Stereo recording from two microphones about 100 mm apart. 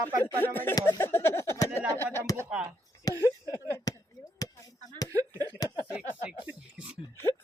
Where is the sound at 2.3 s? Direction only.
40° left (ahead or behind).